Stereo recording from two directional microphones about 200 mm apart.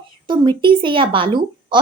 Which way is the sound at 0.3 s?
25° right (ahead or behind).